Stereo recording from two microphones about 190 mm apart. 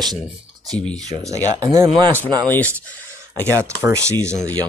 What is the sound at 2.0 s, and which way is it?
Speech, 10° left (ahead or behind).